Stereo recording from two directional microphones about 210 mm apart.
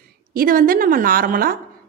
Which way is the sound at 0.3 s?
40° right (ahead or behind).